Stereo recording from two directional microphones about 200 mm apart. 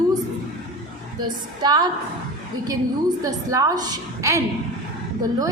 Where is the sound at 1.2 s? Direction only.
20° right (ahead or behind).